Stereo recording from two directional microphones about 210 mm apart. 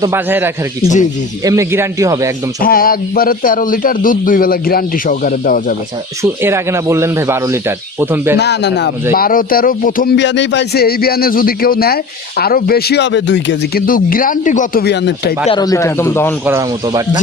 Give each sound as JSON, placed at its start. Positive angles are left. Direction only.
{"t": 0.0, "sound": "speech", "side_deg": -10}
{"t": 2.6, "sound": "speech", "side_deg": 45}
{"t": 6.4, "sound": "speech", "side_deg": -10}
{"t": 8.4, "sound": "a man's voice", "side_deg": 55}
{"t": 9.1, "sound": "a man's voice", "side_deg": 40}
{"t": 10.2, "sound": "a man's voice", "side_deg": 55}
{"t": 13.8, "sound": "a man's voice", "side_deg": 40}
{"t": 15.4, "sound": "a man's voice", "side_deg": 20}
{"t": 16.5, "sound": "speech", "side_deg": -15}